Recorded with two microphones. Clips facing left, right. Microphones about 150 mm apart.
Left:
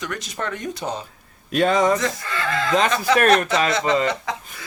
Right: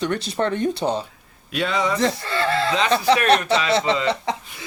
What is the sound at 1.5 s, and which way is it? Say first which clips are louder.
Speech: left 5 dB; 45° left (ahead or behind).